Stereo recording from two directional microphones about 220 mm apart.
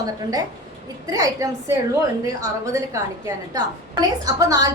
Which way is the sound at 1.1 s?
15° right (ahead or behind).